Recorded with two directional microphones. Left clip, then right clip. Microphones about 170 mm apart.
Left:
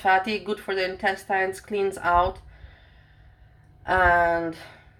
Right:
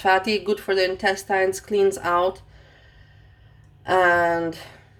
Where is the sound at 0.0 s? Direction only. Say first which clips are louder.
Right 2 dB; 10° right (ahead or behind).